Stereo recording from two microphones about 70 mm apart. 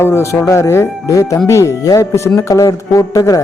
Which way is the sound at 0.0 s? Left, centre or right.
Left.